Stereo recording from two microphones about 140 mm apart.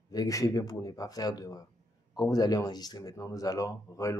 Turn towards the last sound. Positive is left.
turn(degrees=20)  # may be behind; listen again after turning